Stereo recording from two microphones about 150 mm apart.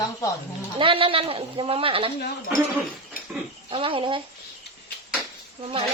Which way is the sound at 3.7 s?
35° right (ahead or behind).